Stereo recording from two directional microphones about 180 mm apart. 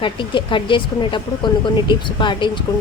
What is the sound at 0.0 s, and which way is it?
Speech, 30° left (ahead or behind).